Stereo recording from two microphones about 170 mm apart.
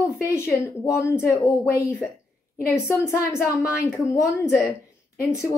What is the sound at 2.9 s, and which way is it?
A woman's voice, 15° left (ahead or behind).